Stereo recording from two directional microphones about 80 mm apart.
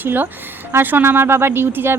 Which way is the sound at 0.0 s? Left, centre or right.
Right.